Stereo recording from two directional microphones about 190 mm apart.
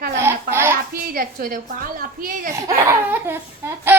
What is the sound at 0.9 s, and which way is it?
A woman's voice, 50° right (ahead or behind).